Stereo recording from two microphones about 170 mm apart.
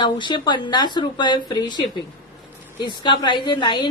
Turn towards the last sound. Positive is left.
turn(degrees=30)  # may be behind; listen again after turning